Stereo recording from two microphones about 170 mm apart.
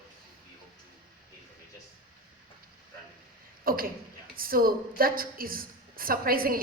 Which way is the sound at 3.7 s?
60° right (ahead or behind).